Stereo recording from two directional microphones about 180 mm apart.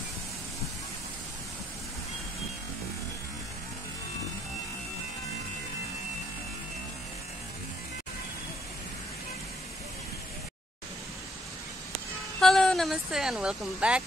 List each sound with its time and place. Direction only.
12.4 s speech: centre (ahead or behind)